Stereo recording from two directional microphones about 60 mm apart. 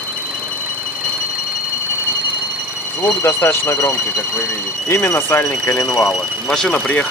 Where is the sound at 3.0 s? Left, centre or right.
Left.